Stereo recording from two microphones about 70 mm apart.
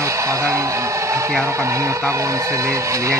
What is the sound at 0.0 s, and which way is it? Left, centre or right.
Speech, right.